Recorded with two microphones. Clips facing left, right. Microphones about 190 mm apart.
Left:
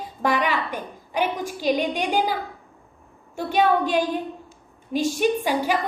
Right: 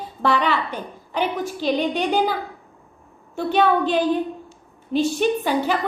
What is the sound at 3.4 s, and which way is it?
A woman's voice, 10° left (ahead or behind).